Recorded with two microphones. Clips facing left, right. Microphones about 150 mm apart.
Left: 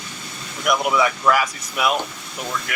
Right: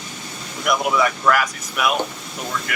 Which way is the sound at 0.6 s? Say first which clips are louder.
Even; 5° left (ahead or behind).